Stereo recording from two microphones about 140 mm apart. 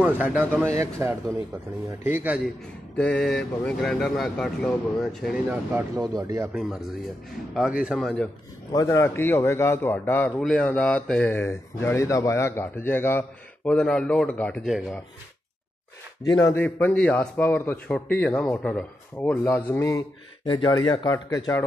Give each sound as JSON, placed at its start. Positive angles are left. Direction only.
{"t": 0.0, "sound": "speech", "side_deg": -15}
{"t": 3.0, "sound": "speech", "side_deg": 5}
{"t": 6.1, "sound": "speech", "side_deg": -25}
{"t": 6.5, "sound": "speech", "side_deg": 0}
{"t": 8.8, "sound": "speech", "side_deg": 15}
{"t": 16.2, "sound": "speech", "side_deg": 25}
{"t": 16.6, "sound": "speech", "side_deg": 15}
{"t": 19.4, "sound": "speech", "side_deg": 20}
{"t": 20.4, "sound": "speech", "side_deg": 35}